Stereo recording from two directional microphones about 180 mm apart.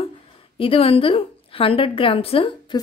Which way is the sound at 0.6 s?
30° left (ahead or behind).